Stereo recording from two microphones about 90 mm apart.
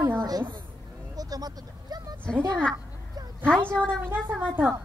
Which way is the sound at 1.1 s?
45° right (ahead or behind).